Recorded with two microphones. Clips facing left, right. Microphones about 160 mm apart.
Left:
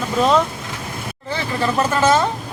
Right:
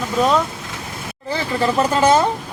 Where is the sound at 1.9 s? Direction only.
15° right (ahead or behind).